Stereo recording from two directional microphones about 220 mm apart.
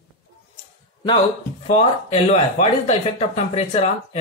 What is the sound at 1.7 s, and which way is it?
Speech, 30° left (ahead or behind).